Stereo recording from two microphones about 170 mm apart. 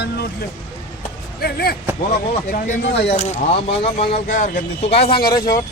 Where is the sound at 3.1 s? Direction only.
40° left (ahead or behind); by 5.5 s 25° left (ahead or behind).